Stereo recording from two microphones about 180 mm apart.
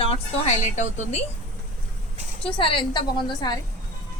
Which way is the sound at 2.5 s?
30° left (ahead or behind).